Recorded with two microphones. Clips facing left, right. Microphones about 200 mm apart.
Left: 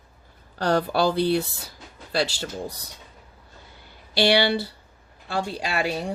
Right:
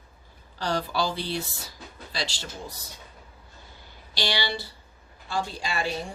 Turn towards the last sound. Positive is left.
turn(degrees=65)  # may be behind; listen again after turning